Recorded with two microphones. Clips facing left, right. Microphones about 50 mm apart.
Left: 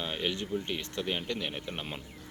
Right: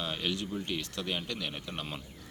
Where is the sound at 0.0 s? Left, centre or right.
Centre.